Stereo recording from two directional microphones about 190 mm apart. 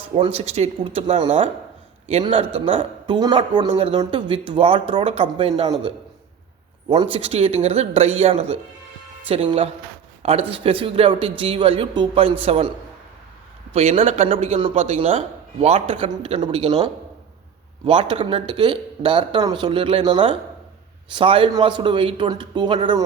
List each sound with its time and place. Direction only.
0.2 s a man's voice: 30° right (ahead or behind)
13.7 s speech: 35° right (ahead or behind)
17.8 s a man's voice: 25° right (ahead or behind)